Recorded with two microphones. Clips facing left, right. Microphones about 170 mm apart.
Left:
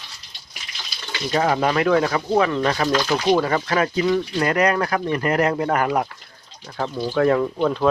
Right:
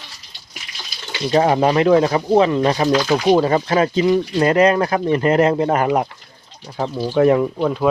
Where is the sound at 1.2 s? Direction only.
25° right (ahead or behind); by 7.9 s 10° right (ahead or behind).